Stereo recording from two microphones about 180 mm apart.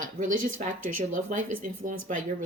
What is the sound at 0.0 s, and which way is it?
Speech, 45° right (ahead or behind).